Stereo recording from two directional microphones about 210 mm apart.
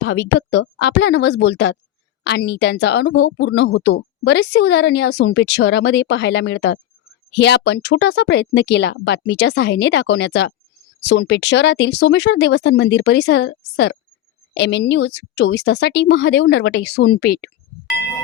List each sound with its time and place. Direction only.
0.0 s a woman's voice: 55° left (ahead or behind)